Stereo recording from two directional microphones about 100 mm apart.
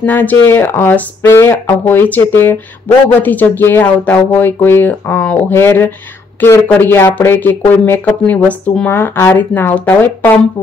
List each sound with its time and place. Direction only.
0.0 s speech: 15° left (ahead or behind)